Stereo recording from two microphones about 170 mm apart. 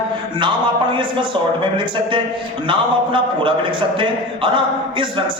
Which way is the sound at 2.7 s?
30° right (ahead or behind).